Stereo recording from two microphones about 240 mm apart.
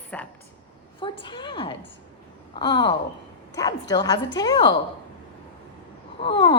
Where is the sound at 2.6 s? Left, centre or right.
Centre.